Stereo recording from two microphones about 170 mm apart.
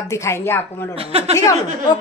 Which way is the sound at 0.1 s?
15° left (ahead or behind).